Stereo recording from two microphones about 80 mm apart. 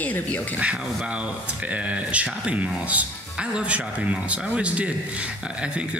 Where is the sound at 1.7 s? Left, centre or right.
Centre.